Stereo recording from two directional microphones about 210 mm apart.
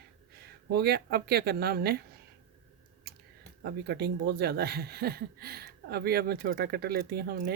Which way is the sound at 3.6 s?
50° right (ahead or behind).